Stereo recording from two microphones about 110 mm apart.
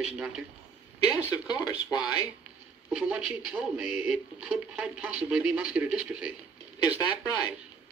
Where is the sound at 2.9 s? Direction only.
10° right (ahead or behind).